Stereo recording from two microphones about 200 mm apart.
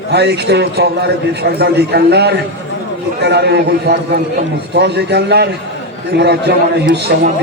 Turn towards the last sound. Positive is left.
turn(degrees=-55)  # may be behind; listen again after turning